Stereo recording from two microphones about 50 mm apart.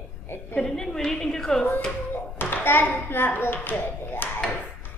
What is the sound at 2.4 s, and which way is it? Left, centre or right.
A child's voice, left.